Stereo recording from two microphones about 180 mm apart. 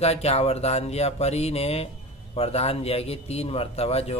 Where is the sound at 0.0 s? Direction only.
35° left (ahead or behind).